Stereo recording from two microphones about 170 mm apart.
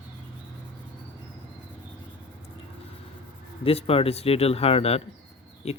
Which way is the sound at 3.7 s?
35° left (ahead or behind).